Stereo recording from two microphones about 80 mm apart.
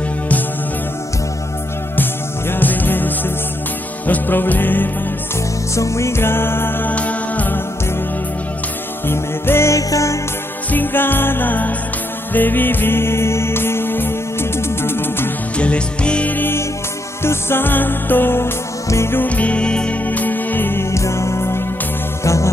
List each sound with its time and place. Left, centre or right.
2.5 s music: left
5.8 s music: left
9.0 s music: left
10.7 s music: left
15.5 s music: centre; by 19.2 s left
19.2 s music: centre; by 22.5 s left